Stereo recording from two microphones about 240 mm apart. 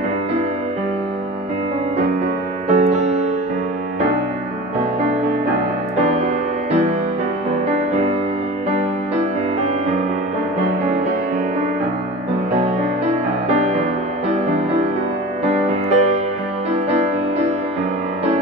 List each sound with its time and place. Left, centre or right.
2.7 s music: right
12.5 s music: right
15.4 s music: right